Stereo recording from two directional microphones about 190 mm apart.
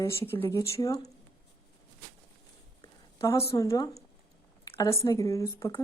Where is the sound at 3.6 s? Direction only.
20° left (ahead or behind).